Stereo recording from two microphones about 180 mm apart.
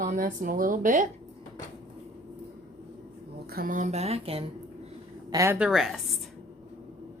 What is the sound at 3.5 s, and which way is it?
Speech, 55° right (ahead or behind).